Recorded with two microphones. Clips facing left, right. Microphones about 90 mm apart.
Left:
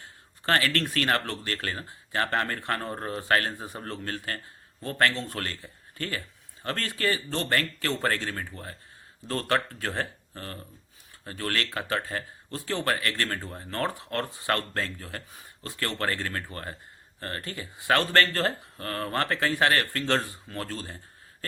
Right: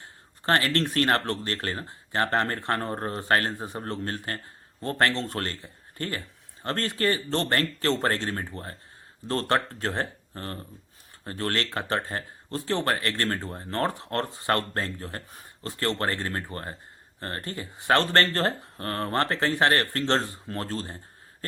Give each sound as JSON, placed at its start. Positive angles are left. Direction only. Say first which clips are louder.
{"t": 0.4, "sound": "speech", "louder": "right 2 dB", "side_deg": -30}